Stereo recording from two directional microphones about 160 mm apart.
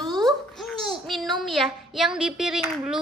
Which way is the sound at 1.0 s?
Centre (ahead or behind).